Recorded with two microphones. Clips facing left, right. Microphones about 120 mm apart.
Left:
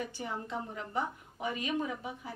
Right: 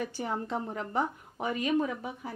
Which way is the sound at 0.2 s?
55° right (ahead or behind).